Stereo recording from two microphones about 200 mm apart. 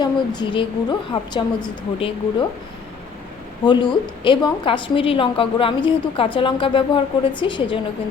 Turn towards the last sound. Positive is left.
turn(degrees=25)  # may be behind; listen again after turning